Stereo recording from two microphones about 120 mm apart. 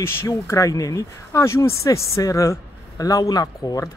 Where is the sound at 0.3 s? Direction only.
30° left (ahead or behind).